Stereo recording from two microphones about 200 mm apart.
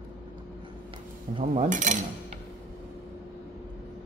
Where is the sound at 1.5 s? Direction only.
40° right (ahead or behind).